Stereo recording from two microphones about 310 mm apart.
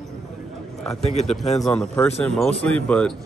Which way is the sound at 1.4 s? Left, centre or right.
Centre.